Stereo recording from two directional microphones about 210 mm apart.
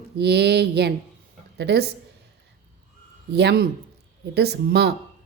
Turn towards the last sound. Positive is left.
turn(degrees=-50)  # may be behind; listen again after turning